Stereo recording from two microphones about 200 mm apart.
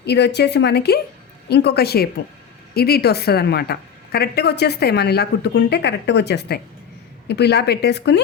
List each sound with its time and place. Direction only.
0.0 s a woman's voice: 55° left (ahead or behind)